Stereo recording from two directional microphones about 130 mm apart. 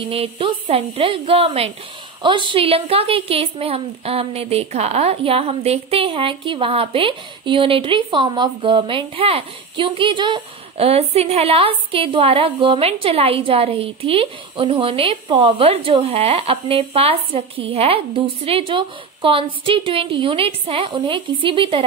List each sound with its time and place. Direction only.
0.0 s a woman's voice: 45° right (ahead or behind)